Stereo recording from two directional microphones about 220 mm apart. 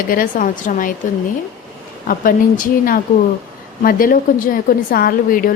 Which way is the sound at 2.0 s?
40° left (ahead or behind).